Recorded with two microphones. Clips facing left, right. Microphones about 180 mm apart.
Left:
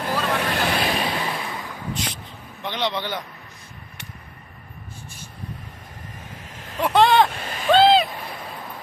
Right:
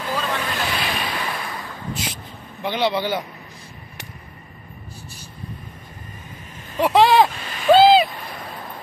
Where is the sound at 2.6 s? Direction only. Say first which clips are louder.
Right 5 dB; 10° right (ahead or behind).